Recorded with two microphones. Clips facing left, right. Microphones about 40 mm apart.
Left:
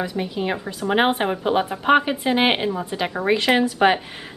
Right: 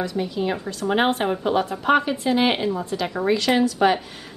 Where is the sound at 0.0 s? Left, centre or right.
Centre.